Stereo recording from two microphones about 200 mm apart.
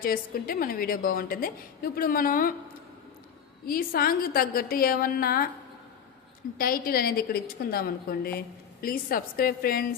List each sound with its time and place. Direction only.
0.0 s a woman's voice: 45° left (ahead or behind)
3.7 s a woman's voice: 45° left (ahead or behind)
6.6 s a woman's voice: 45° left (ahead or behind)